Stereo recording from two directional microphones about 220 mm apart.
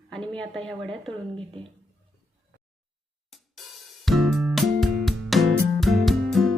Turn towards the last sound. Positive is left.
turn(degrees=0)  # may be behind; listen again after turning